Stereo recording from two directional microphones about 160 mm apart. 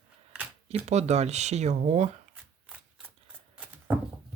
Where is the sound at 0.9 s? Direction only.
45° right (ahead or behind).